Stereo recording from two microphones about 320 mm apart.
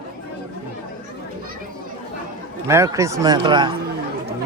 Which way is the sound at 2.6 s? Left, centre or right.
Centre.